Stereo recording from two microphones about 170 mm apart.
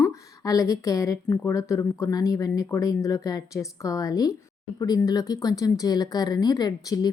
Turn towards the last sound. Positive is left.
turn(degrees=20)  # may be behind; listen again after turning